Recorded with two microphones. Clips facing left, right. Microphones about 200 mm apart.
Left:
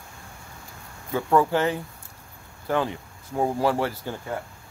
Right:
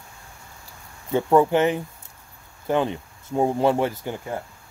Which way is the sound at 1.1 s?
20° right (ahead or behind).